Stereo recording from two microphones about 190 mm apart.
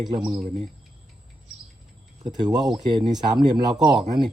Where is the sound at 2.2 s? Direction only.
20° right (ahead or behind).